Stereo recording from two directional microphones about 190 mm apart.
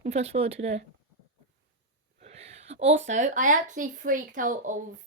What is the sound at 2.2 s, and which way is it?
A woman's voice, 35° right (ahead or behind).